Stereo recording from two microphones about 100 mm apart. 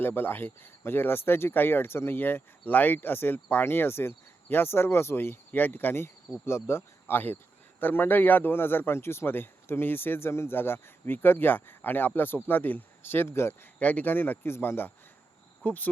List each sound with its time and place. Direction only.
0.0 s speech: 20° left (ahead or behind)
13.7 s speech: 15° left (ahead or behind)